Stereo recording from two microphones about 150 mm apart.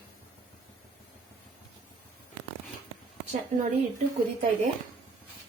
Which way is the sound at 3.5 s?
50° right (ahead or behind).